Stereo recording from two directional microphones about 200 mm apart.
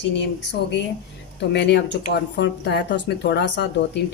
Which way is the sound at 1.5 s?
60° left (ahead or behind).